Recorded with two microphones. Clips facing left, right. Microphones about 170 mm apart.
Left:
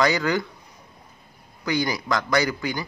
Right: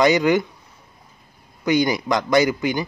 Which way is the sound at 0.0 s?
20° right (ahead or behind).